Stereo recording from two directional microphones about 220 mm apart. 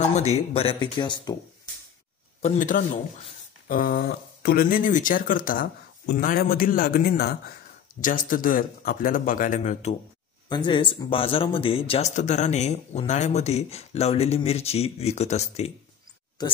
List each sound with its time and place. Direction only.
0.0 s speech: 30° left (ahead or behind)
2.4 s speech: 35° left (ahead or behind)
16.4 s speech: 20° left (ahead or behind)